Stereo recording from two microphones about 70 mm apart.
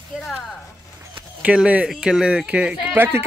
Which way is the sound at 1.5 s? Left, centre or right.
Centre.